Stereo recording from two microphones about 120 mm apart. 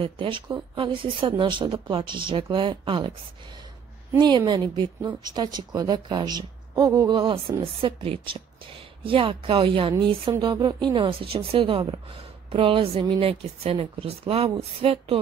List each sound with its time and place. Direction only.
0.0 s speech: 45° right (ahead or behind)
4.2 s a woman's voice: 40° right (ahead or behind)
13.2 s a woman's voice: 55° right (ahead or behind)